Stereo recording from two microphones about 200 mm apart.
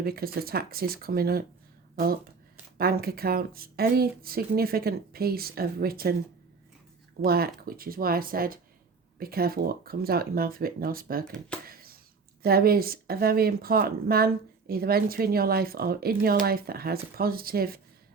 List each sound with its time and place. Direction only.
0.0 s a woman's voice: 50° right (ahead or behind)
2.7 s a woman's voice: 50° right (ahead or behind)
7.3 s a woman's voice: 50° right (ahead or behind)
11.3 s speech: 5° left (ahead or behind)
11.6 s a sound: 50° right (ahead or behind)
12.4 s a woman's voice: 50° right (ahead or behind)